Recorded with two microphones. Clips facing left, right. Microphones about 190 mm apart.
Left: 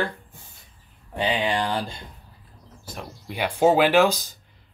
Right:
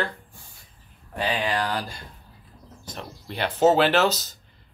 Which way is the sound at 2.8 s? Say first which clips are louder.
Left 1 dB; 10° left (ahead or behind).